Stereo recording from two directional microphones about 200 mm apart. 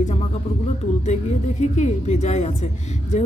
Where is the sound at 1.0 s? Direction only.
35° left (ahead or behind).